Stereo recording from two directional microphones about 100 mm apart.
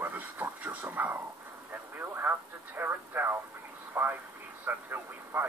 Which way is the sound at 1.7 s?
20° right (ahead or behind).